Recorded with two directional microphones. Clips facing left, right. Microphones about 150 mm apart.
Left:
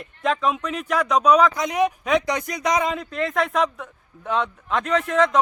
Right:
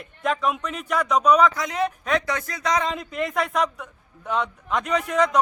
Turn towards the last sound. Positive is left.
turn(degrees=-5)  # may be behind; listen again after turning